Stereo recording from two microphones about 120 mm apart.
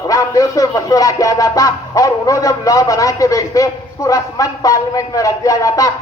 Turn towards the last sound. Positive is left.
turn(degrees=25)  # may be behind; listen again after turning